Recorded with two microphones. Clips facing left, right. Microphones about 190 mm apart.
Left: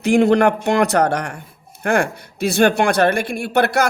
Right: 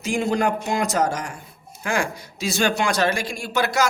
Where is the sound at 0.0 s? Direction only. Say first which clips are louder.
Left 8 dB; 65° left (ahead or behind).